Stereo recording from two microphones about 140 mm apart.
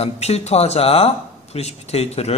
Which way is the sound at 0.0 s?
50° left (ahead or behind).